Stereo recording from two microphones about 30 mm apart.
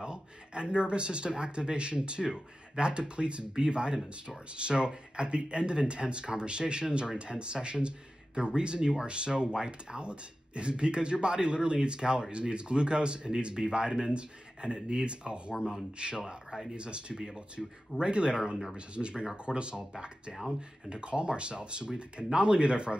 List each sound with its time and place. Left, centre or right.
0.0 s speech: right
2.9 s speech: right
15.5 s speech: centre
16.0 s speech: right
16.4 s speech: centre
16.7 s speech: right
20.9 s speech: right